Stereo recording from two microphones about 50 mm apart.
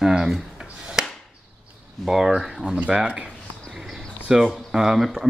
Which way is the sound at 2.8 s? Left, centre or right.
Right.